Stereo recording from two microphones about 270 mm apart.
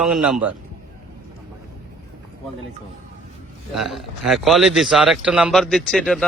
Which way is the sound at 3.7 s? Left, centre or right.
Centre.